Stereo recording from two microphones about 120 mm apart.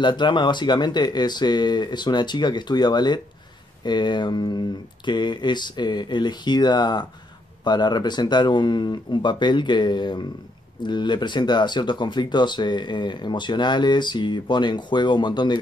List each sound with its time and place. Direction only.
0.0 s speech: 40° left (ahead or behind)